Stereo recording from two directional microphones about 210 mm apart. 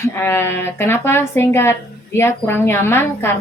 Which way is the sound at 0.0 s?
10° left (ahead or behind).